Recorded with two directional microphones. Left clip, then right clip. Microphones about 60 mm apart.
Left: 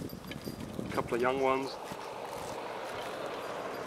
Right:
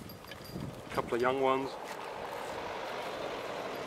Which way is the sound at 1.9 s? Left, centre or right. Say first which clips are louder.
Even; centre.